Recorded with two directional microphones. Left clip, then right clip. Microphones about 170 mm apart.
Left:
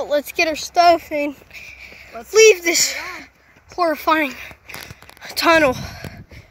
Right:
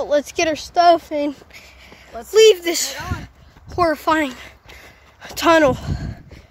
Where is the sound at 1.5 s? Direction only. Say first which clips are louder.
Left 5 dB; 5° right (ahead or behind).